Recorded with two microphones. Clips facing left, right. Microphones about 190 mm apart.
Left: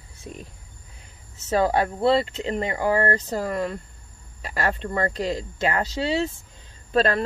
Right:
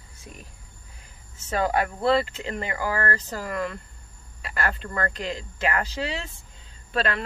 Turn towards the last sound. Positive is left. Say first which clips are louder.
# left 6 dB
turn(degrees=40)  # may be behind; listen again after turning